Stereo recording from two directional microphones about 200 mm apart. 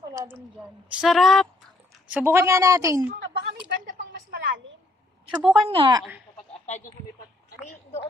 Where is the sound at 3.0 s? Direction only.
55° right (ahead or behind).